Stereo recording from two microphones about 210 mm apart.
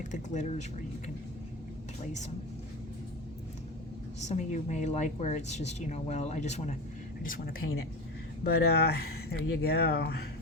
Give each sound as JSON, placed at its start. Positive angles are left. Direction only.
{"t": 0.1, "sound": "speech", "side_deg": 35}
{"t": 4.2, "sound": "speech", "side_deg": 35}